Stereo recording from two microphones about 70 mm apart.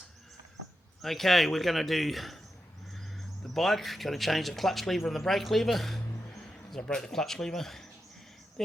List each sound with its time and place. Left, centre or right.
1.0 s speech: centre
3.4 s speech: centre